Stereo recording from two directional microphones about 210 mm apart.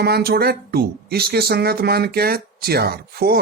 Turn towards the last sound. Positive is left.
turn(degrees=-50)  # may be behind; listen again after turning